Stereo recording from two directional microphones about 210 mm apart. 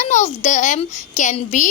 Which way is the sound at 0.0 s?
35° left (ahead or behind).